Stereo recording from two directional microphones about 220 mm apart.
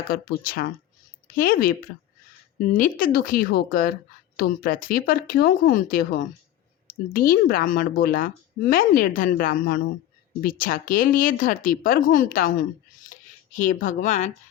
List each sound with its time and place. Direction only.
0.1 s a woman's voice: 40° left (ahead or behind)
2.7 s a woman's voice: 35° left (ahead or behind)
7.1 s a woman's voice: 40° left (ahead or behind)
13.1 s a sound: 35° left (ahead or behind)